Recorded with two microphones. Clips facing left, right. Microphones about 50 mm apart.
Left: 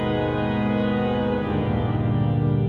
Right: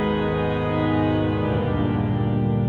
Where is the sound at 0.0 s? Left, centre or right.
Centre.